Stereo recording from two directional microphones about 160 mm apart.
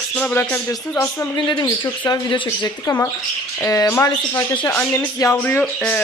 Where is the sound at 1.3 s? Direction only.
25° left (ahead or behind).